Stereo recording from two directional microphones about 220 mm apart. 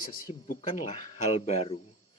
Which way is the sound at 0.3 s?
35° left (ahead or behind).